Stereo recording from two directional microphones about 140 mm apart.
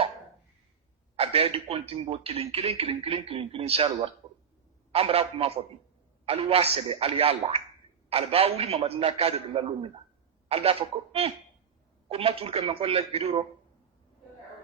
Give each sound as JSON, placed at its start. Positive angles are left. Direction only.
{"t": 1.1, "sound": "speech", "side_deg": -45}